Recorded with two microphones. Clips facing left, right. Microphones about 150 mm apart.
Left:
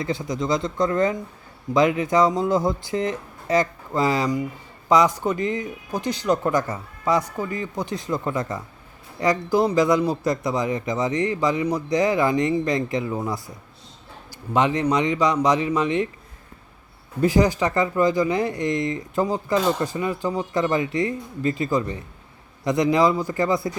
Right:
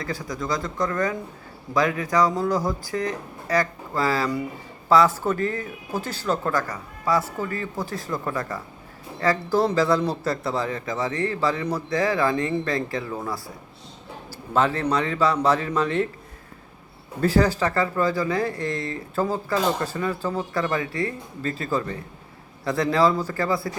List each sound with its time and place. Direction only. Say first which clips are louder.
0.0 s speech: left 4 dB; 25° left (ahead or behind)
17.2 s speech: left 1 dB; 15° left (ahead or behind)